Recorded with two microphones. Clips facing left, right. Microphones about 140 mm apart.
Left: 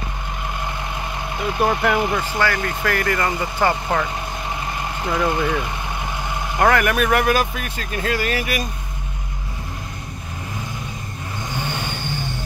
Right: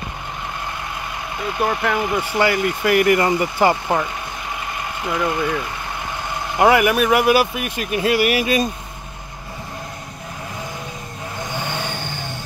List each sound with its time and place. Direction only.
1.6 s speech: 5° left (ahead or behind)
2.1 s speech: 15° right (ahead or behind)
5.1 s speech: 5° left (ahead or behind)
6.6 s speech: 10° right (ahead or behind)